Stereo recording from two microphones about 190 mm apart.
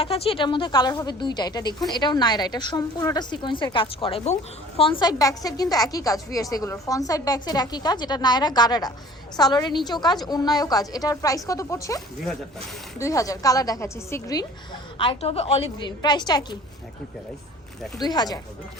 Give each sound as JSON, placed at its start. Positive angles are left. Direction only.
{"t": 0.0, "sound": "a woman's voice", "side_deg": 30}
{"t": 14.9, "sound": "a woman's voice", "side_deg": 30}
{"t": 18.0, "sound": "a woman's voice", "side_deg": 20}